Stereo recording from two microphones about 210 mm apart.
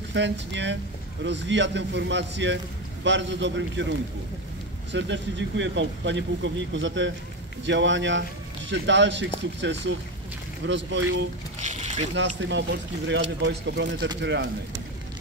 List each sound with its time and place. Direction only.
0.1 s a man's voice: 60° right (ahead or behind)
4.9 s a man's voice: 60° right (ahead or behind)
11.6 s speech: 35° right (ahead or behind)
12.2 s a man's voice: 60° right (ahead or behind)